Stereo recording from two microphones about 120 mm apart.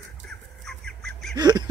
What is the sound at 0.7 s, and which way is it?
Squawk, 5° left (ahead or behind).